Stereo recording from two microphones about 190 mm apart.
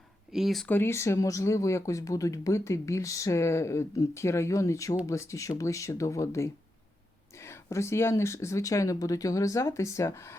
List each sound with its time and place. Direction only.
0.3 s speech: centre (ahead or behind)